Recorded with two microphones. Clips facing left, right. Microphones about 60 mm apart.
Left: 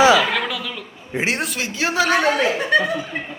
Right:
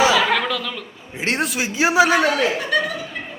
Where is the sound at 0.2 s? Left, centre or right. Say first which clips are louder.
Right 2 dB; centre.